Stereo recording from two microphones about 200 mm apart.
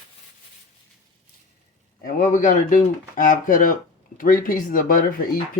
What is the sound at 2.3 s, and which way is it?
Speech, 40° left (ahead or behind).